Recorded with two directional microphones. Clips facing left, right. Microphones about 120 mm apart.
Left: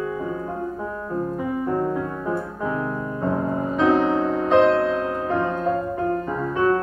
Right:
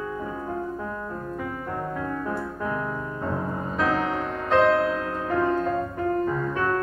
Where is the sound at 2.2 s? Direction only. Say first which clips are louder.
Left 3 dB; 20° left (ahead or behind).